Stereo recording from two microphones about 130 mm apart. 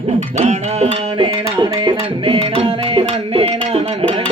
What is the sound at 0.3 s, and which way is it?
Music, 55° right (ahead or behind).